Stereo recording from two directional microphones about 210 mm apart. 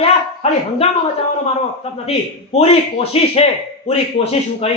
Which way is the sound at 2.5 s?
30° left (ahead or behind).